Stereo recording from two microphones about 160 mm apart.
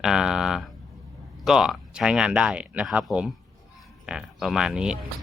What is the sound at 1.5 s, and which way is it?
Speech, 5° right (ahead or behind).